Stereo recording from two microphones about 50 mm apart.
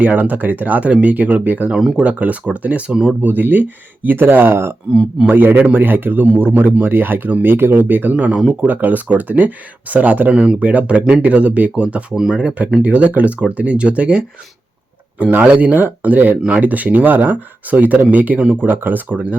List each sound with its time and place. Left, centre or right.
0.0 s speech: right
2.9 s speech: centre
3.2 s speech: right
5.3 s speech: right
8.1 s speech: right
10.3 s speech: right
12.1 s speech: centre
12.4 s speech: right